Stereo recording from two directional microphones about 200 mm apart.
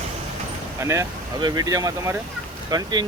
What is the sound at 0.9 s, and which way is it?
Speech, 15° right (ahead or behind).